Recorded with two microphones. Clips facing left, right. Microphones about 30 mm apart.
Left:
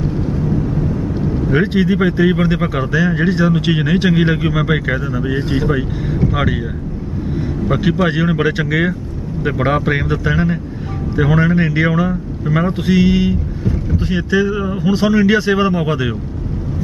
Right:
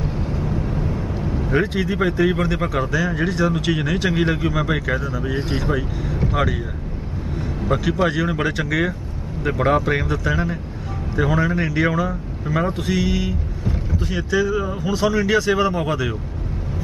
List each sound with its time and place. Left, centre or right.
0.5 s vehicle: centre
1.5 s speech: left
7.3 s vehicle: centre
8.0 s speech: left